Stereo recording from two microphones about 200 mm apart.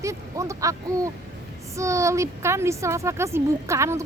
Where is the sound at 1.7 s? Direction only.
15° right (ahead or behind).